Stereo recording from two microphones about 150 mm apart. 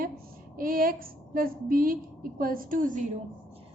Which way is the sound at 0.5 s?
70° right (ahead or behind).